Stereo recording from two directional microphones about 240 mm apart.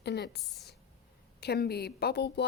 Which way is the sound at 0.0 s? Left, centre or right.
Left.